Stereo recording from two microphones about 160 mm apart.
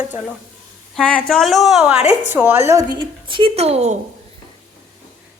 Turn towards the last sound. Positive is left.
turn(degrees=-45)  # may be behind; listen again after turning